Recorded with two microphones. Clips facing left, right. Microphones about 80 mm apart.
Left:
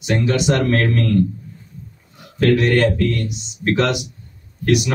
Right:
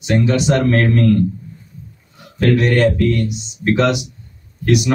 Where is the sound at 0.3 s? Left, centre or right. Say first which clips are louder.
Even; right.